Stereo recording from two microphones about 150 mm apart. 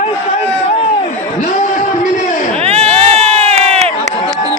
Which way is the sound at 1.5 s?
50° left (ahead or behind).